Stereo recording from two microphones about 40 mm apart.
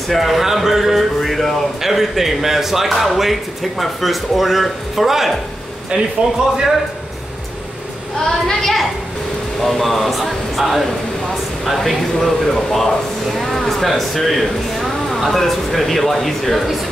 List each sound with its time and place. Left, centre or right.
0.1 s speech: centre
0.7 s music: centre
1.2 s speech: centre
5.9 s speech: right
8.3 s a woman's voice: centre
14.8 s a sound: centre
15.3 s speech: centre